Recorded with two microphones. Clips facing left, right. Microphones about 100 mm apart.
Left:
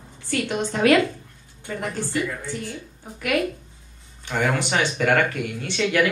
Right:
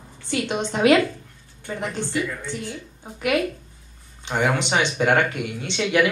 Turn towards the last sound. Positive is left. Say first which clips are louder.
# right 1 dB
turn(degrees=-20)  # may be behind; listen again after turning